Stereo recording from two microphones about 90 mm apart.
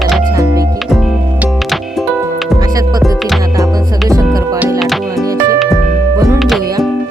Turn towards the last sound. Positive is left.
turn(degrees=-30)  # may be behind; listen again after turning